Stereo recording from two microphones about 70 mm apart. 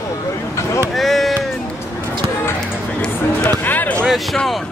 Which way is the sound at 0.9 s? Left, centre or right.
Centre.